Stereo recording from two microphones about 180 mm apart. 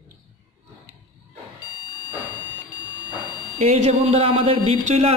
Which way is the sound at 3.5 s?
35° right (ahead or behind).